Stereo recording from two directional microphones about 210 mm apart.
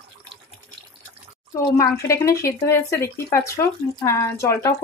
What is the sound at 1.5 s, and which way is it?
Speech, 15° left (ahead or behind).